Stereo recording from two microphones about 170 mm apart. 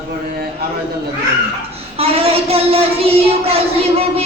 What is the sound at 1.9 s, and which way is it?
A child's voice, 35° right (ahead or behind).